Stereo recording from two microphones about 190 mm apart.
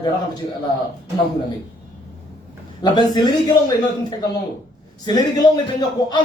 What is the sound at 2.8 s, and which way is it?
Speech, 20° left (ahead or behind).